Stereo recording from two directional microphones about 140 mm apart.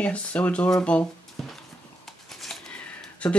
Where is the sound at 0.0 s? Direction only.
10° left (ahead or behind).